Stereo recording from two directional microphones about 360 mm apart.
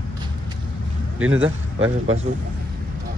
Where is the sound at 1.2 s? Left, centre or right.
Right.